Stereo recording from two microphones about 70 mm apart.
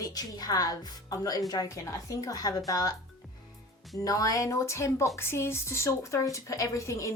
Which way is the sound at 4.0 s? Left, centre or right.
Left.